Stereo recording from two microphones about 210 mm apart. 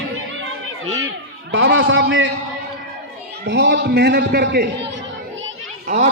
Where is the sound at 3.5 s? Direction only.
55° right (ahead or behind).